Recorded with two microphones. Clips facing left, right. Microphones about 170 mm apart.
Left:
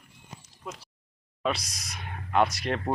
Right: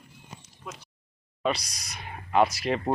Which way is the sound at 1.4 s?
Centre (ahead or behind).